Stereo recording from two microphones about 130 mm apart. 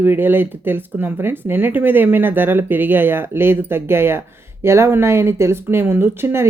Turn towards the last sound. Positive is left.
turn(degrees=-20)  # may be behind; listen again after turning